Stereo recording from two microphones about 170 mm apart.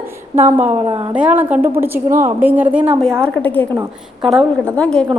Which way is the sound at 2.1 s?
50° right (ahead or behind).